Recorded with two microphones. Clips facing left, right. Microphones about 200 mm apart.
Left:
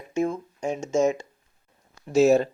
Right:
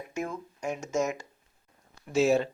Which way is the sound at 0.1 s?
30° left (ahead or behind).